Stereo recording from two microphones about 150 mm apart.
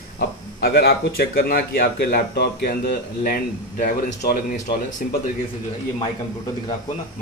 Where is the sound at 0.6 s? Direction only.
90° left.